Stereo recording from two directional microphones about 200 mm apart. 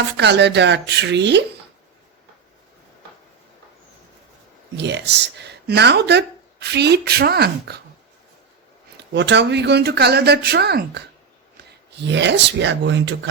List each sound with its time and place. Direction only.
0.2 s speech: 60° right (ahead or behind)
4.8 s speech: 60° right (ahead or behind)
9.1 s speech: 60° right (ahead or behind)